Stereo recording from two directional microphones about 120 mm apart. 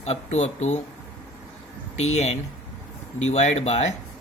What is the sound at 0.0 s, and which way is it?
Speech, 65° left (ahead or behind).